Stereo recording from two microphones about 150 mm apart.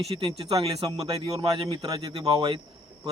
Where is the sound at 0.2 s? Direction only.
35° right (ahead or behind).